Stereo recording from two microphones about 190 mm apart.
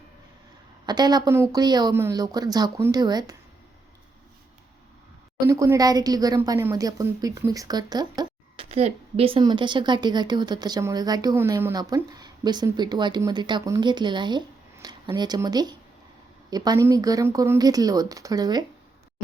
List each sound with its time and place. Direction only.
0.9 s a woman's voice: 20° right (ahead or behind)
5.5 s a woman's voice: 15° right (ahead or behind)
8.7 s a woman's voice: 30° right (ahead or behind)